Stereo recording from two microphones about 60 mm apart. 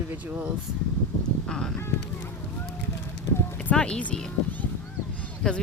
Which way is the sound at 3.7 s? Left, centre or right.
Centre.